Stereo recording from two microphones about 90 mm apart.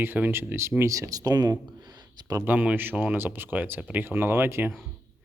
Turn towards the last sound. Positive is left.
turn(degrees=-25)  # may be behind; listen again after turning